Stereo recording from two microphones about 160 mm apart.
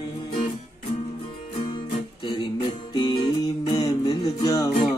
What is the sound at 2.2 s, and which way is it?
Music, 30° left (ahead or behind).